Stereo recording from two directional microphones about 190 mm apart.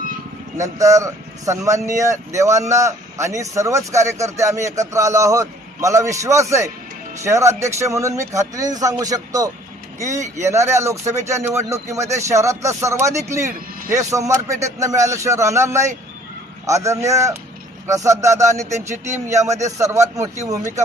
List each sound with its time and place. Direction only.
0.6 s speech: 15° right (ahead or behind)